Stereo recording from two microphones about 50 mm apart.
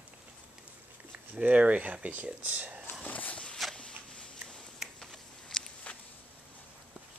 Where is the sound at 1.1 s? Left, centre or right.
Right.